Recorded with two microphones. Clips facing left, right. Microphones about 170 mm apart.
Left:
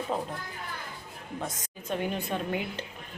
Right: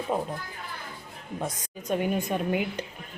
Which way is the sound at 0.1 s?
10° right (ahead or behind).